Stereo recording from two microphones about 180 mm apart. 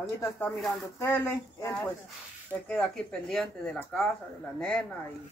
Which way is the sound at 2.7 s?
5° left (ahead or behind).